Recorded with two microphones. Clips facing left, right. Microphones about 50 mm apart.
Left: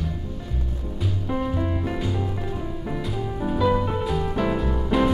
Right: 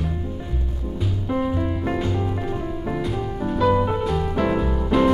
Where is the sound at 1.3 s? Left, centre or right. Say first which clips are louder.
Right 3 dB; centre.